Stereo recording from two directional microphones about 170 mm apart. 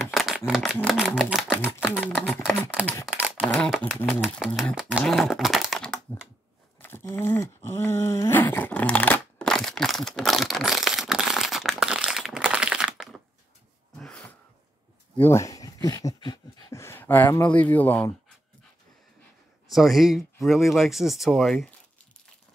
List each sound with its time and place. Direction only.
0.0 s shuffling cards: centre (ahead or behind)
0.5 s speech: centre (ahead or behind)
3.2 s a sound: 5° right (ahead or behind)
3.4 s speech: centre (ahead or behind)
6.8 s a sound: 10° left (ahead or behind)
15.1 s speech: 15° left (ahead or behind)
16.8 s speech: 15° left (ahead or behind)
19.7 s speech: centre (ahead or behind)